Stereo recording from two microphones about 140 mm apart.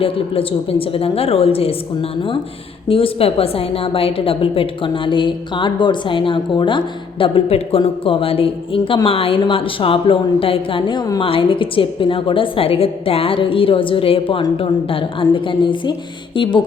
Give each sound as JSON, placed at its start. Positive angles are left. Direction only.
{"t": 0.0, "sound": "a woman's voice", "side_deg": 40}
{"t": 11.2, "sound": "a woman's voice", "side_deg": 40}